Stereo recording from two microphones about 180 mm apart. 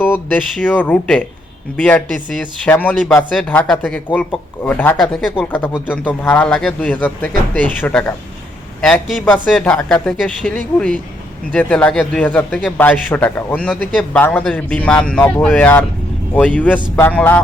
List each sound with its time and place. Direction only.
0.0 s speech: 10° left (ahead or behind)